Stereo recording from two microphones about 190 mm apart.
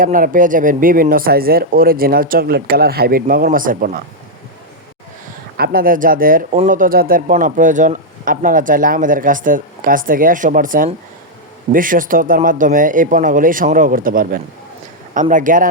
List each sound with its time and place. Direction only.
0.0 s speech: 45° right (ahead or behind)
5.5 s speech: 50° right (ahead or behind)